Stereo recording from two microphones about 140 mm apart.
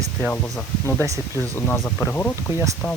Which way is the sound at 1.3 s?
15° left (ahead or behind).